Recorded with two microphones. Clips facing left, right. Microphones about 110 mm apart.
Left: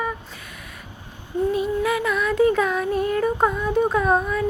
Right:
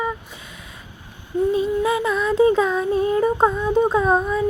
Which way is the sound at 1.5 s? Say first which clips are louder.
Right 2 dB; 25° right (ahead or behind).